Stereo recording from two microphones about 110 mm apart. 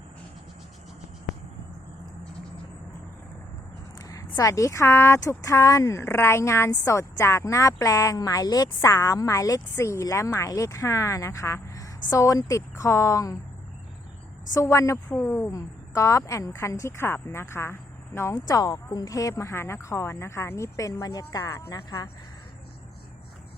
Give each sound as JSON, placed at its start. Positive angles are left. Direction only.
{"t": 4.1, "sound": "speech", "side_deg": 30}
{"t": 14.5, "sound": "speech", "side_deg": 25}